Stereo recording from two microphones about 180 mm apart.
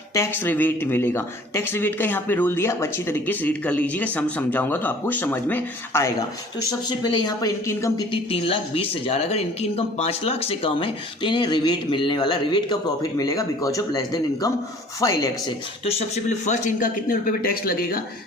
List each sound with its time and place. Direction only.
0.1 s speech: 10° left (ahead or behind)
6.7 s speech: 25° left (ahead or behind)
8.1 s speech: 30° left (ahead or behind)
15.8 s speech: 35° left (ahead or behind); by 18.0 s 55° left (ahead or behind)